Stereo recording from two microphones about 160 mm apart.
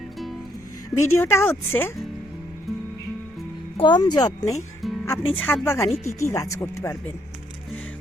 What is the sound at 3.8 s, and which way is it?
Speech, 30° left (ahead or behind).